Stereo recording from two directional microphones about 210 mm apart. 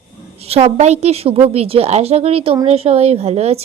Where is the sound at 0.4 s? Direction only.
30° right (ahead or behind).